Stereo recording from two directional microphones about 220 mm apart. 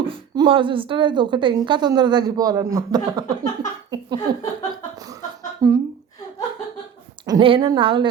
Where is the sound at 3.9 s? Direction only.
20° right (ahead or behind).